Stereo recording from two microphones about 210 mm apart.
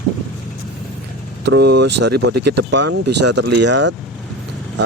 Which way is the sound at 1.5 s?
55° right (ahead or behind).